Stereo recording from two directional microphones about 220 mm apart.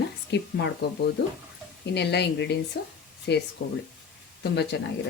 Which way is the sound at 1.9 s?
50° left (ahead or behind).